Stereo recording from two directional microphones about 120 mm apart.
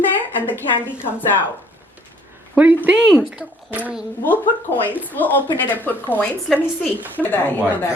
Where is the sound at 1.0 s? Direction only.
15° left (ahead or behind).